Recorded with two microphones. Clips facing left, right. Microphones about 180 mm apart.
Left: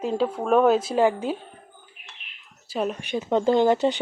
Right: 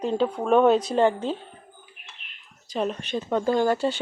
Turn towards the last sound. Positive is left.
turn(degrees=20)  # may be behind; listen again after turning